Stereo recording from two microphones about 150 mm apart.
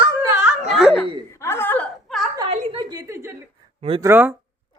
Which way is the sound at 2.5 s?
35° right (ahead or behind).